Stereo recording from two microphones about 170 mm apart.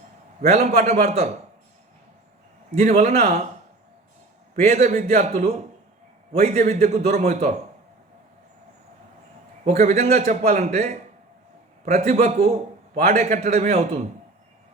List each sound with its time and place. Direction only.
0.4 s a man's voice: 40° right (ahead or behind)
2.7 s a man's voice: 45° right (ahead or behind)
4.5 s a man's voice: 40° right (ahead or behind)
9.6 s a man's voice: 45° right (ahead or behind)